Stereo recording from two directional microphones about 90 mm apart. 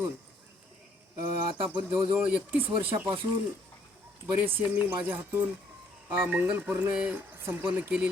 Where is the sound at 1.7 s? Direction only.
25° right (ahead or behind).